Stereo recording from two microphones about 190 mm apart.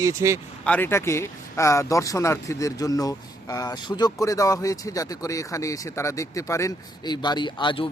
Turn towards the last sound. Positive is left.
turn(degrees=25)  # may be behind; listen again after turning